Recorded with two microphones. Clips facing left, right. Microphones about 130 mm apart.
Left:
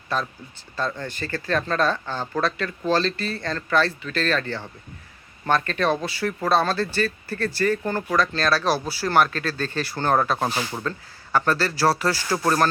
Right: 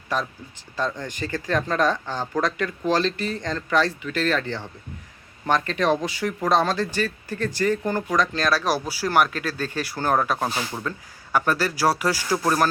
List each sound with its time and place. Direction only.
0.1 s speech: 15° right (ahead or behind)
10.8 s speech: 10° right (ahead or behind)